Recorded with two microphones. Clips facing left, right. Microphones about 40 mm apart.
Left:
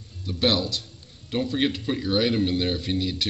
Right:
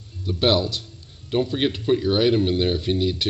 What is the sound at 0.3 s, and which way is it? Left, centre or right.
Speech, centre.